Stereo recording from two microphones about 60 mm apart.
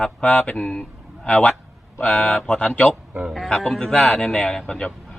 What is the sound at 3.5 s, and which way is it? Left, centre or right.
A woman's voice, centre.